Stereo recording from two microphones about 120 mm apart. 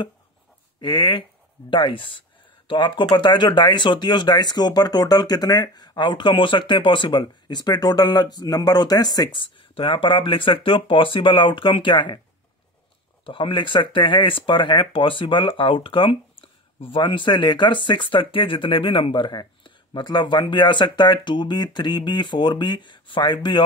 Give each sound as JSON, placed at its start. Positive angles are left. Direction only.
{"t": 0.7, "sound": "speech", "side_deg": 40}
{"t": 13.2, "sound": "speech", "side_deg": 45}